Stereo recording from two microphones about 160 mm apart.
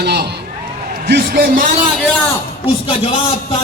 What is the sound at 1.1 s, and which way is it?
Speech, 65° right (ahead or behind).